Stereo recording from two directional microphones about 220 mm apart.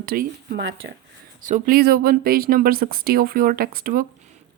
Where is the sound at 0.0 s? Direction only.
45° right (ahead or behind).